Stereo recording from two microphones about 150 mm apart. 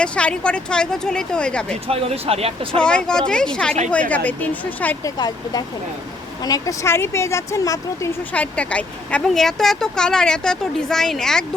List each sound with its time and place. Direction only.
0.0 s speech: 10° left (ahead or behind)
1.9 s speech: 40° right (ahead or behind)
2.7 s speech: 5° left (ahead or behind)
5.0 s speech: 25° left (ahead or behind)
8.3 s speech: 10° left (ahead or behind)